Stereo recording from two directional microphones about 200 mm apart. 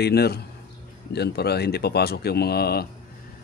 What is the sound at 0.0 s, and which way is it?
Speech, 55° left (ahead or behind).